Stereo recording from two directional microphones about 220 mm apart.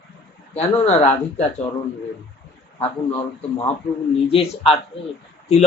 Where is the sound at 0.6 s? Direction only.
30° left (ahead or behind).